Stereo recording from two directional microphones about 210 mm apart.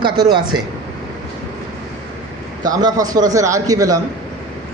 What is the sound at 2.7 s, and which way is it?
A man's voice, 20° right (ahead or behind).